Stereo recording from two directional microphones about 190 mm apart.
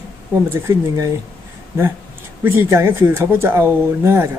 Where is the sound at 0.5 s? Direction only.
15° right (ahead or behind).